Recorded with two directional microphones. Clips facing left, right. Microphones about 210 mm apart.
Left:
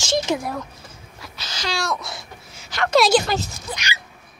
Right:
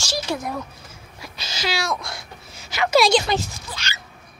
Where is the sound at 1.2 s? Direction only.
10° right (ahead or behind).